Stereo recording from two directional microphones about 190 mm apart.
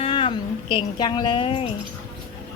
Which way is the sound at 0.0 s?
25° left (ahead or behind).